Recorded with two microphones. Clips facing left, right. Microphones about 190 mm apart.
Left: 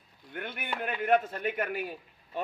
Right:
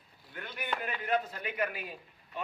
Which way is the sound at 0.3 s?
55° left (ahead or behind).